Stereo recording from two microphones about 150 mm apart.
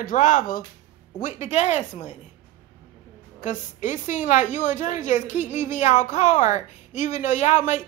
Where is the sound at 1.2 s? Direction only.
50° left (ahead or behind).